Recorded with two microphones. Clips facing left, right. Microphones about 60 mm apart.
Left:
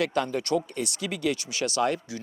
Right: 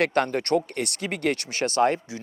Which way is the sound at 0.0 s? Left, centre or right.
Right.